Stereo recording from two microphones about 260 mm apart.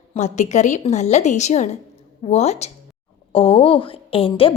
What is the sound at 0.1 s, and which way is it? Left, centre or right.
Speech, left.